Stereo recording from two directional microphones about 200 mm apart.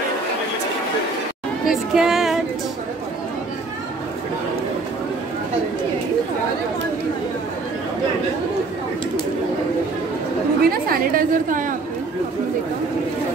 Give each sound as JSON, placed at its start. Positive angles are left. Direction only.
{"t": 1.7, "sound": "speech", "side_deg": 0}
{"t": 10.6, "sound": "a woman's voice", "side_deg": -45}